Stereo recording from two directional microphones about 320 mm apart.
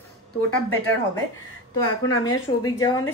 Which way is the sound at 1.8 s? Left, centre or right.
Left.